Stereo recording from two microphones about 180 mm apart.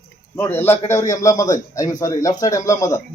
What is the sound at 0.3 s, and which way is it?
A man's voice, 10° left (ahead or behind).